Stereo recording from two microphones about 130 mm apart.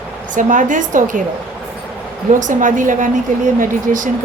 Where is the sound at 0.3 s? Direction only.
80° right.